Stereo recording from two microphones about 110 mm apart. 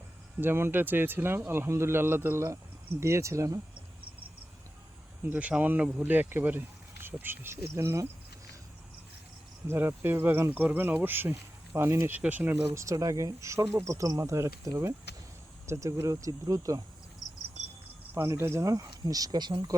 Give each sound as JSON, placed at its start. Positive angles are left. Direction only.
{"t": 0.3, "sound": "speech", "side_deg": -20}
{"t": 5.2, "sound": "speech", "side_deg": -15}
{"t": 9.6, "sound": "speech", "side_deg": -20}
{"t": 18.1, "sound": "speech", "side_deg": -25}